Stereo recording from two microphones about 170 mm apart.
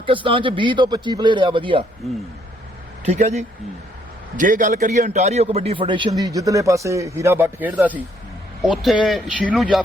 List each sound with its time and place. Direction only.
0.0 s a man's voice: 30° right (ahead or behind)
3.1 s a man's voice: 40° right (ahead or behind); by 9.8 s centre (ahead or behind)